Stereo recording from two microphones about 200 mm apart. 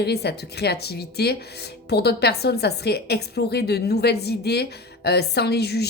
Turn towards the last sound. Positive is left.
turn(degrees=55)  # may be behind; listen again after turning